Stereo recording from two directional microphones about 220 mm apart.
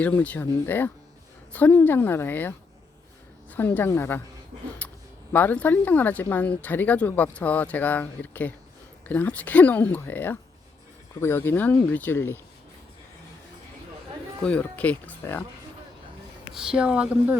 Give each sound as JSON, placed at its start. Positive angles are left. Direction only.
{"t": 0.0, "sound": "speech", "side_deg": 5}
{"t": 3.5, "sound": "speech", "side_deg": 10}
{"t": 4.8, "sound": "a sound", "side_deg": 5}
{"t": 5.3, "sound": "speech", "side_deg": 10}
{"t": 14.4, "sound": "speech", "side_deg": 5}
{"t": 16.5, "sound": "a woman's voice", "side_deg": -5}